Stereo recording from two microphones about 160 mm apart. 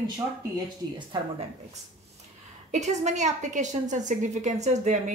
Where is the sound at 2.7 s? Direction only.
45° right (ahead or behind).